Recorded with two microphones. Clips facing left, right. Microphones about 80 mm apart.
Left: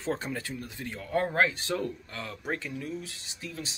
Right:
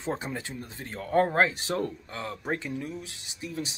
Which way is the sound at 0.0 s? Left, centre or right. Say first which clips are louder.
Even; centre.